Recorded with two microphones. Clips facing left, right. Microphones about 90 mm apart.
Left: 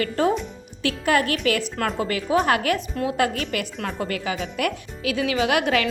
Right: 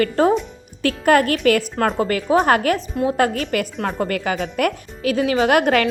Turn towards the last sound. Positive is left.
turn(degrees=-45)  # may be behind; listen again after turning